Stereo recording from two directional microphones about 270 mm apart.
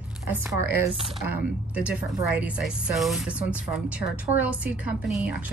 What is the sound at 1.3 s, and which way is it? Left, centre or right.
A woman's voice, centre.